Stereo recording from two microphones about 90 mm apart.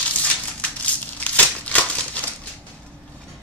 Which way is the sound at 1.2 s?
15° left (ahead or behind).